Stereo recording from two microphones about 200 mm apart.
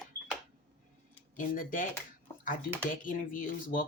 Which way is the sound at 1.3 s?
40° left (ahead or behind).